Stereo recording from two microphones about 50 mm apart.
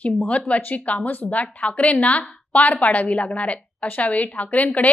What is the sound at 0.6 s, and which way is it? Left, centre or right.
A woman's voice, left.